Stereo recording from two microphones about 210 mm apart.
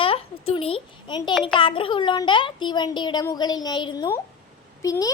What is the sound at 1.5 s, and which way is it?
A child's voice, 25° left (ahead or behind).